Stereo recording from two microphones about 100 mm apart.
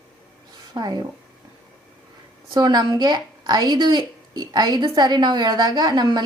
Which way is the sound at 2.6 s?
45° right (ahead or behind).